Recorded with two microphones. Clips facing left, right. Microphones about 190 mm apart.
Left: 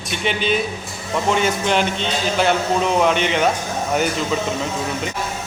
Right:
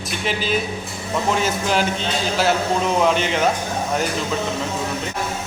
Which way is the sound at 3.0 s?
Centre (ahead or behind).